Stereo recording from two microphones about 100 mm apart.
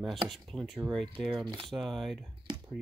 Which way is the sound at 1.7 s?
5° left (ahead or behind).